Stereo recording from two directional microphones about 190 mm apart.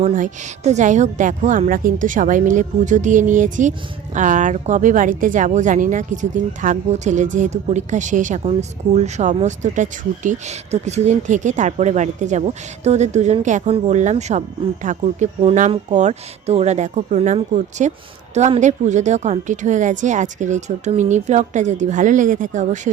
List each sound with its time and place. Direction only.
0.0 s a woman's voice: 35° right (ahead or behind)